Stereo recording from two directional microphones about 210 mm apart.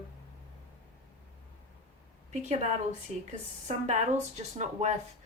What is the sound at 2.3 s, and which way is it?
Speech, 30° right (ahead or behind).